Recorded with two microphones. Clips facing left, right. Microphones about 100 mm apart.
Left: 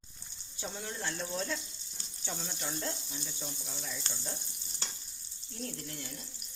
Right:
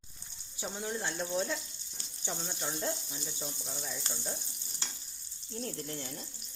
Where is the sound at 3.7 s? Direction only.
5° right (ahead or behind).